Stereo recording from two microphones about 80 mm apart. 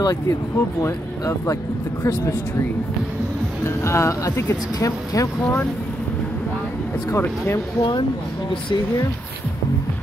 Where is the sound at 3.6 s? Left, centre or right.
Left.